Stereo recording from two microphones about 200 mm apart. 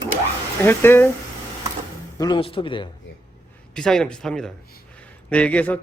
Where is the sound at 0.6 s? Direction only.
10° left (ahead or behind).